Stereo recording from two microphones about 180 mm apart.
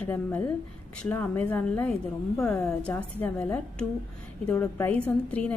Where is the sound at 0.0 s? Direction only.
10° left (ahead or behind).